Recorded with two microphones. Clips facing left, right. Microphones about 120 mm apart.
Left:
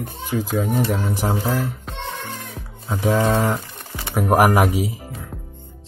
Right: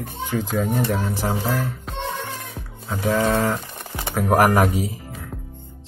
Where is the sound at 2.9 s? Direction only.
15° left (ahead or behind).